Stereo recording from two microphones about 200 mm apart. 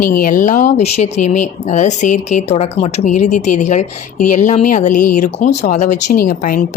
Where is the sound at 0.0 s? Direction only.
45° left (ahead or behind).